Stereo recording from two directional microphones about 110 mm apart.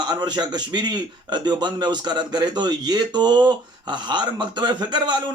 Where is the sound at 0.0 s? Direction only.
40° right (ahead or behind).